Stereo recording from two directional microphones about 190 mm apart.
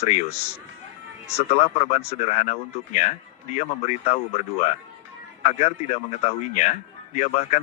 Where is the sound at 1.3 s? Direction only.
35° left (ahead or behind).